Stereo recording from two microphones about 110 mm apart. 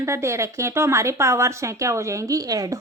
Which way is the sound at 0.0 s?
25° right (ahead or behind).